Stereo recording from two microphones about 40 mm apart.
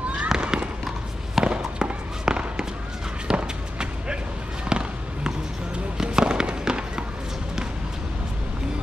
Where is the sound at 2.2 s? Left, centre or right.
Right.